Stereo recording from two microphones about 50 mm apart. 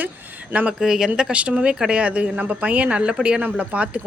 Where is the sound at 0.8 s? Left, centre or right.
Centre; by 4.0 s right.